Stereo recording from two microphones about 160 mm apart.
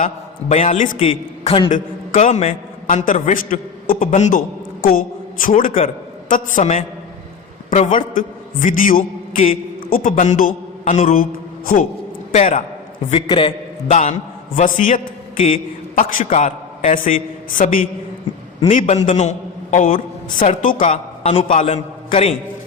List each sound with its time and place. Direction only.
0.0 s a man's voice: 50° left (ahead or behind)
1.5 s a man's voice: 30° left (ahead or behind)
1.7 s a man's voice: 50° left (ahead or behind)
12.3 s a man's voice: 55° left (ahead or behind)
13.1 s a man's voice: 35° left (ahead or behind)
13.9 s a man's voice: 50° left (ahead or behind)
19.7 s a man's voice: 60° left (ahead or behind)
20.9 s a man's voice: 40° left (ahead or behind)